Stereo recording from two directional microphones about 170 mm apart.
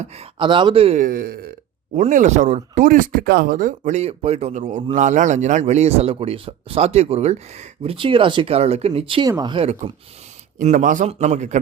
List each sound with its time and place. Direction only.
0.0 s speech: 40° right (ahead or behind)
0.9 s a man's voice: 60° right (ahead or behind)
2.0 s speech: 45° right (ahead or behind)
7.9 s speech: 30° right (ahead or behind)
10.6 s speech: 45° right (ahead or behind)